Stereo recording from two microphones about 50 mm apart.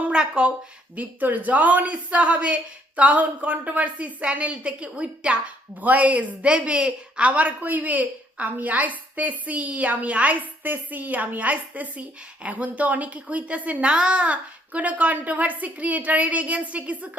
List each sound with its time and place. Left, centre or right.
0.1 s speech: centre
0.9 s speech: right
5.8 s a woman's voice: right